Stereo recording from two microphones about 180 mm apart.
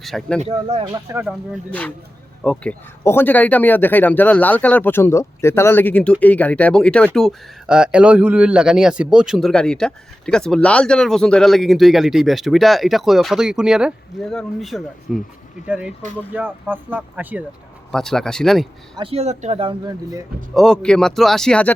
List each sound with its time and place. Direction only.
0.0 s speech: centre (ahead or behind)
0.4 s speech: 35° right (ahead or behind)
1.1 s speech: 5° right (ahead or behind)
2.4 s speech: 5° left (ahead or behind); by 17.4 s 10° right (ahead or behind)
17.9 s speech: 5° left (ahead or behind)
18.9 s speech: 35° right (ahead or behind)
20.5 s speech: centre (ahead or behind)